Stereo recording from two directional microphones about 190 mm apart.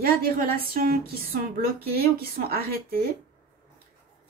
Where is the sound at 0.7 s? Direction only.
50° right (ahead or behind).